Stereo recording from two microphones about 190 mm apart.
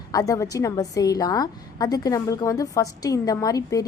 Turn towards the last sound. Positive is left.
turn(degrees=20)  # may be behind; listen again after turning